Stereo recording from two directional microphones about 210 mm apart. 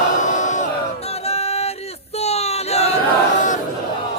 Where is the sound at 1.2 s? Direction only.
30° left (ahead or behind).